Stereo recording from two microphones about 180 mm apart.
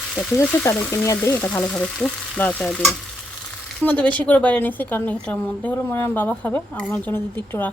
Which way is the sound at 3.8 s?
10° left (ahead or behind).